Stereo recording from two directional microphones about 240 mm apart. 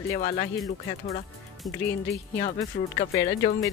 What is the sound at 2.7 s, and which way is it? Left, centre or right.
Speech, left.